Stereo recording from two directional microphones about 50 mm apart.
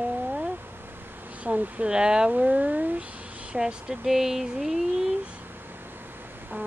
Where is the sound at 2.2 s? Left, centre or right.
Right.